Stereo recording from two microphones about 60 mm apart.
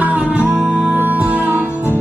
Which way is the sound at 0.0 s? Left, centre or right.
Right.